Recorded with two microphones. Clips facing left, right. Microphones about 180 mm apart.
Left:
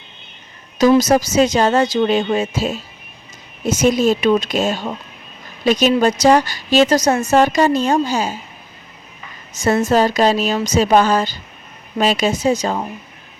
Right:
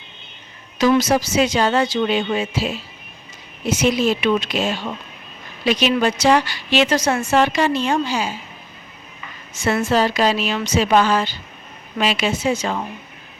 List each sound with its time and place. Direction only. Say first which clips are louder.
0.8 s a woman's voice: left 4 dB; 40° left (ahead or behind)
9.8 s a woman's voice: left 3 dB; 45° left (ahead or behind)